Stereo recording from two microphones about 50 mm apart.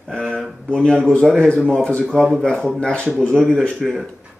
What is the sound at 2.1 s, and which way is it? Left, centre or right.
Speech, centre.